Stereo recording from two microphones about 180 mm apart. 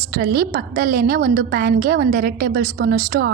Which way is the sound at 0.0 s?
60° right (ahead or behind).